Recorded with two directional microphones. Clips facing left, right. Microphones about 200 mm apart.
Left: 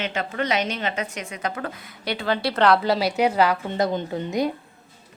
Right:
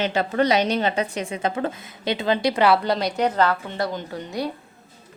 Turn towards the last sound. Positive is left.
turn(degrees=20)  # may be behind; listen again after turning